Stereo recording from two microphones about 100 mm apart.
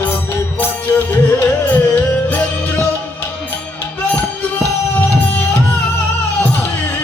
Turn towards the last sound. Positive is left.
turn(degrees=20)  # may be behind; listen again after turning